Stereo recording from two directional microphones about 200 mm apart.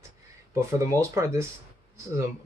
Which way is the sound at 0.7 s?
15° right (ahead or behind).